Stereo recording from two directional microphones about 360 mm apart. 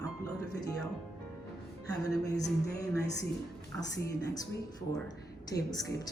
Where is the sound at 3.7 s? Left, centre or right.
Centre.